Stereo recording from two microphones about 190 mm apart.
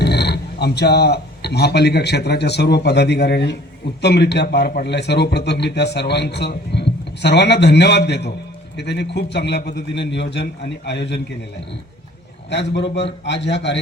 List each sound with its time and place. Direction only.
0.0 s speech: 60° left (ahead or behind)
12.5 s speech: 65° left (ahead or behind)